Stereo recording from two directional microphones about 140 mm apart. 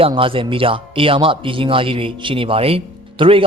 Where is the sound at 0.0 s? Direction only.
40° right (ahead or behind).